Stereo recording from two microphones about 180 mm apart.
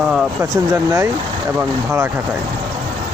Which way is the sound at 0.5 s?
20° right (ahead or behind).